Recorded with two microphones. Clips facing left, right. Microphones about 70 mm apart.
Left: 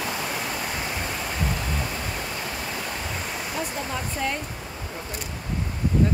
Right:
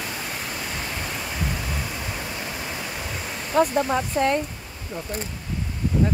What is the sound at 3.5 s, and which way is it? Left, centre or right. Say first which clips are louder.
Speech: right 13 dB; right.